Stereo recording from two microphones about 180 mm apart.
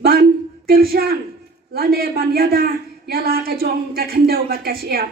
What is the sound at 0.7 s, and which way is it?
A man's voice, 60° right (ahead or behind).